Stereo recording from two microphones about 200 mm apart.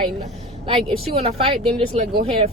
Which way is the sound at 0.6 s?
30° right (ahead or behind).